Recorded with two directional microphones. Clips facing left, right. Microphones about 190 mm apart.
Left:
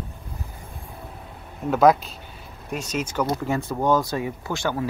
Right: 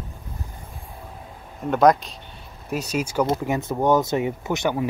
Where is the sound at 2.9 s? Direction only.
10° right (ahead or behind).